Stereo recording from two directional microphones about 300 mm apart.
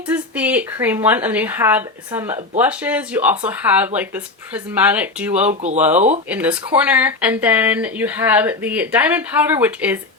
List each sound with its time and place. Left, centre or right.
0.1 s speech: centre
5.5 s speech: right
6.3 s speech: centre